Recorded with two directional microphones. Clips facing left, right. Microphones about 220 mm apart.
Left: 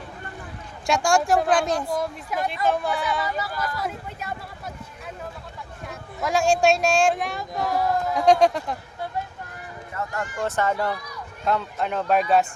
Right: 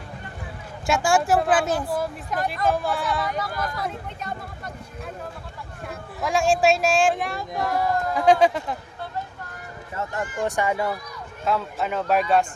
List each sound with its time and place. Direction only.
0.9 s speech: 5° right (ahead or behind)
5.9 s speech: centre (ahead or behind)
9.9 s speech: 25° right (ahead or behind)
10.4 s speech: 15° right (ahead or behind)